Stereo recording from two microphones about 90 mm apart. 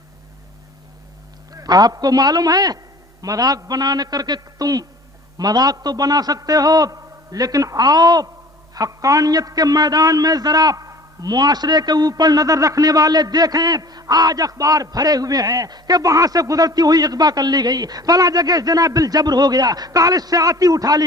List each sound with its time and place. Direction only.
1.5 s a man's voice: 45° right (ahead or behind)